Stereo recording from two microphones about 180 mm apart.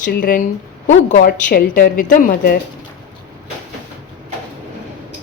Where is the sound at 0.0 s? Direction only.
50° left (ahead or behind).